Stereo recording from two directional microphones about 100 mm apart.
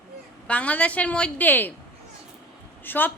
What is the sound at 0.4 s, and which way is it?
A woman's voice, 15° left (ahead or behind).